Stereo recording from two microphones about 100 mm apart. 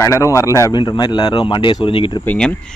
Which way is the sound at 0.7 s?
45° left (ahead or behind).